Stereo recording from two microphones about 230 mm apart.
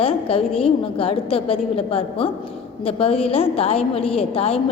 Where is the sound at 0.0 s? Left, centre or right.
Left.